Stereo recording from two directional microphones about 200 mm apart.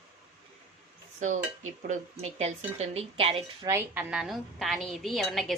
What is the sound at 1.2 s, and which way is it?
Dishes, 40° right (ahead or behind).